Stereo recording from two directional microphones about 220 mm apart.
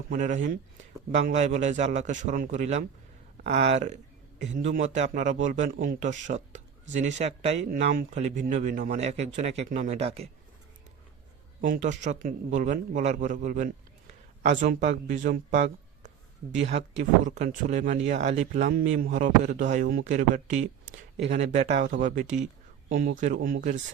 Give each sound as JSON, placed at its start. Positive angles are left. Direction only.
{"t": 0.1, "sound": "speech", "side_deg": -35}
{"t": 7.7, "sound": "speech", "side_deg": -45}
{"t": 11.6, "sound": "speech", "side_deg": -35}